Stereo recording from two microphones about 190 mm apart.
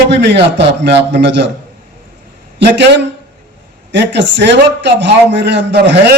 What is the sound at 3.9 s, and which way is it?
A man's voice, 70° right (ahead or behind).